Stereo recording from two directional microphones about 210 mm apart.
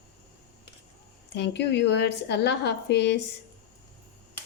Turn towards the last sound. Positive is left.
turn(degrees=55)  # may be behind; listen again after turning